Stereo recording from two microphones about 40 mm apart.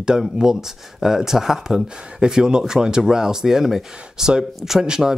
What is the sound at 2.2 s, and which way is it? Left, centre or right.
Speech, right.